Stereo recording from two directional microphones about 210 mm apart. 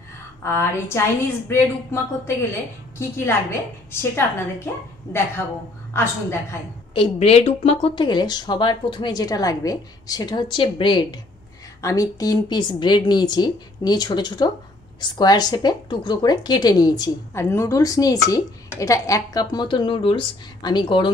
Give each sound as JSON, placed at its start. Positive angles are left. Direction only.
{"t": 0.4, "sound": "a woman's voice", "side_deg": 10}
{"t": 6.9, "sound": "speech", "side_deg": 25}